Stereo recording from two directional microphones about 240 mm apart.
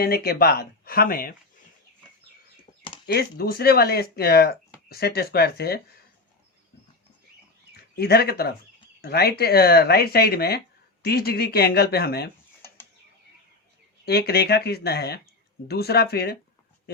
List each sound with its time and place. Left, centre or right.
0.0 s speech: left
3.1 s speech: left
7.7 s speech: left
14.0 s speech: left